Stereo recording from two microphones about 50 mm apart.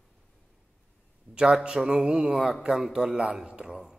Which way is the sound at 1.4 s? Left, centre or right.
Centre.